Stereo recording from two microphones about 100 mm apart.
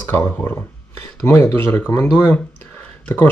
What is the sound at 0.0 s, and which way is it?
Speech, 20° left (ahead or behind).